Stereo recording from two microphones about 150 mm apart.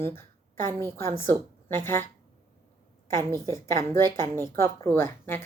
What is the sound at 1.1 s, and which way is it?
Speech, 15° left (ahead or behind).